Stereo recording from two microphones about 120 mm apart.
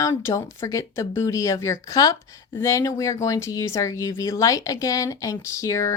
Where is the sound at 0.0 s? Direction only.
25° left (ahead or behind).